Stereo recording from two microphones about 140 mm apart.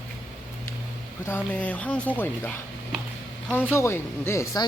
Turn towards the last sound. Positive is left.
turn(degrees=20)  # may be behind; listen again after turning